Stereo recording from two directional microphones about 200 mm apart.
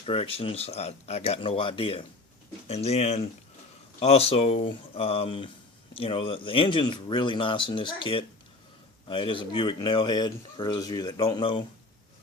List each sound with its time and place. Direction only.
0.0 s speech: 30° left (ahead or behind)